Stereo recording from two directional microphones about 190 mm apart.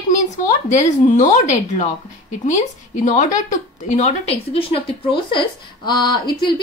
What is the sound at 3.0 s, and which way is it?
A woman's voice, 40° left (ahead or behind).